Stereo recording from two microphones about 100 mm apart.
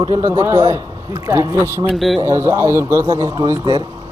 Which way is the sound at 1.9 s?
Centre (ahead or behind).